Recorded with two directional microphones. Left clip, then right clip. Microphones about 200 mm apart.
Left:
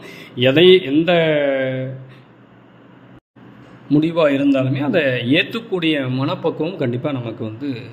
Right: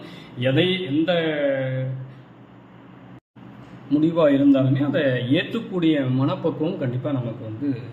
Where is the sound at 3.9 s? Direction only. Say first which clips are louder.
Left 3 dB; 35° left (ahead or behind).